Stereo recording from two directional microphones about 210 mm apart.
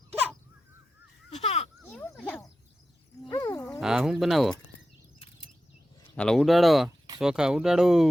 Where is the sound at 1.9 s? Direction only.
5° left (ahead or behind).